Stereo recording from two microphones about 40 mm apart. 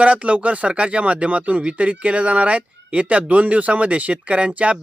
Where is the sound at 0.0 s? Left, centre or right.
Right.